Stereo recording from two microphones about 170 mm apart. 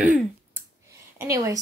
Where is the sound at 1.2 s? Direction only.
20° right (ahead or behind).